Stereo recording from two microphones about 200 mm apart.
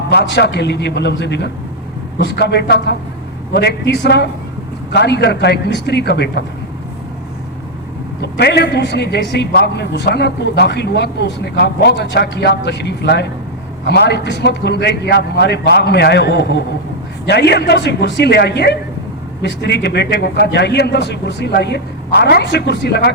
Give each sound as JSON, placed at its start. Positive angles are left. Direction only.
{"t": 0.1, "sound": "a man's voice", "side_deg": 55}
{"t": 8.2, "sound": "a man's voice", "side_deg": 55}